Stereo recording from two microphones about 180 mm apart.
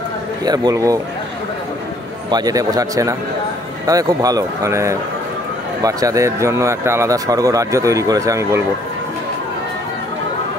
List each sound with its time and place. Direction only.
0.5 s speech: 20° right (ahead or behind)
2.3 s speech: 20° right (ahead or behind)